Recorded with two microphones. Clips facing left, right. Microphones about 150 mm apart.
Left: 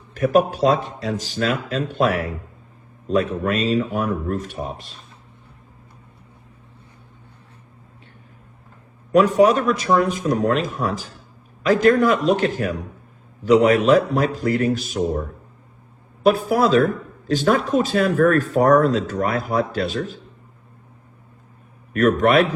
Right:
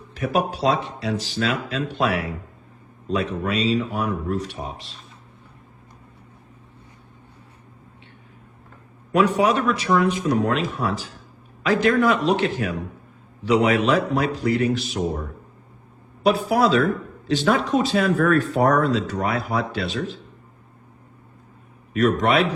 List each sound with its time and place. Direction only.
0.1 s speech: 45° left (ahead or behind)
9.1 s speech: 40° left (ahead or behind)
21.9 s speech: 50° left (ahead or behind)